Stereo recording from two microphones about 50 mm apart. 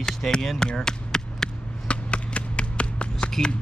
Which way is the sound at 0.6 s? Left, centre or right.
Centre.